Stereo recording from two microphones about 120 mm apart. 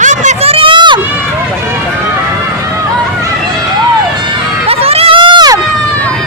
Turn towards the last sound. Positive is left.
turn(degrees=-35)  # may be behind; listen again after turning